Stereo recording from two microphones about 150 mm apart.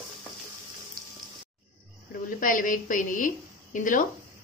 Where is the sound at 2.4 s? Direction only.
65° left (ahead or behind).